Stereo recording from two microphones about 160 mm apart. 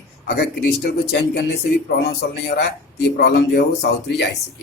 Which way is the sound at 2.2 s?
70° left (ahead or behind).